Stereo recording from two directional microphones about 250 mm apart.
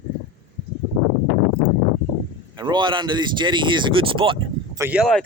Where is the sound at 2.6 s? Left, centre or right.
Centre.